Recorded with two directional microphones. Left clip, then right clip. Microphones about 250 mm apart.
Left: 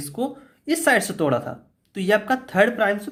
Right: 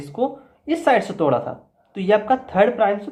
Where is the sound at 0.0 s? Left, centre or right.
Left.